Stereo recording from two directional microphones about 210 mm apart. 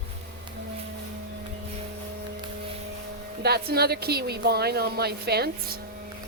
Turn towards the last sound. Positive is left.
turn(degrees=-50)  # may be behind; listen again after turning